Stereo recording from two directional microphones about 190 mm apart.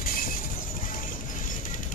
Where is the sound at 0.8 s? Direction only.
45° left (ahead or behind).